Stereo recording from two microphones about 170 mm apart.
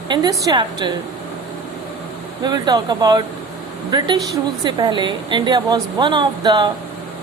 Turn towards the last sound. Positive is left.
turn(degrees=-25)  # may be behind; listen again after turning